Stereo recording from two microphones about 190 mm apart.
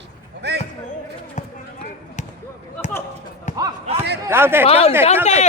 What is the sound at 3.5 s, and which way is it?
Basketball bounce, 40° left (ahead or behind).